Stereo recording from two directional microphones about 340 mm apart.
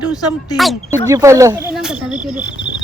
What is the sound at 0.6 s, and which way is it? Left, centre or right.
Speech, centre.